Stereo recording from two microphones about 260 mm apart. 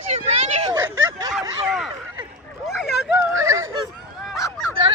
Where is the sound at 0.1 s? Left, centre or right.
Right.